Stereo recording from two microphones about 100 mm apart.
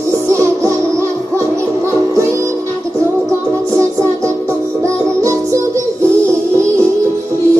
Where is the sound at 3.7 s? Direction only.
30° right (ahead or behind).